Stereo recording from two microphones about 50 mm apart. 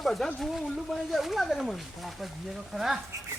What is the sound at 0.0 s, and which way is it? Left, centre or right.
Speech, centre.